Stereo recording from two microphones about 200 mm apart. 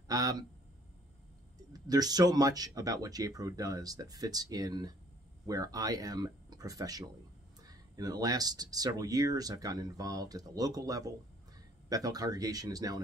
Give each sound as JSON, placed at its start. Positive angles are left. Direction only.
{"t": 0.1, "sound": "speech", "side_deg": -20}
{"t": 1.7, "sound": "speech", "side_deg": -20}